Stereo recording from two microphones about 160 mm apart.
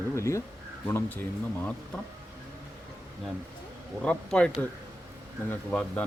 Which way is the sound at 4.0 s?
5° left (ahead or behind).